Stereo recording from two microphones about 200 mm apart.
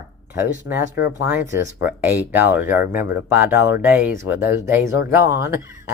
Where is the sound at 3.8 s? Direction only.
10° right (ahead or behind).